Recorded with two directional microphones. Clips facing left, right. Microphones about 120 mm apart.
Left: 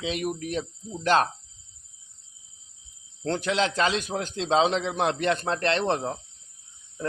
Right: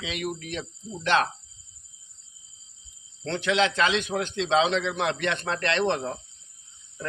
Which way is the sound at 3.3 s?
40° left (ahead or behind).